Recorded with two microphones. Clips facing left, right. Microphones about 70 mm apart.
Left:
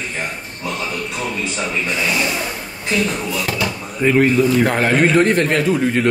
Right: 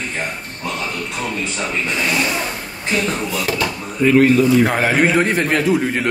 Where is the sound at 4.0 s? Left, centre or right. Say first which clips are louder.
Right 2 dB; centre.